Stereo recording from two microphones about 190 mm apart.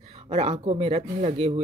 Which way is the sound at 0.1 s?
35° right (ahead or behind).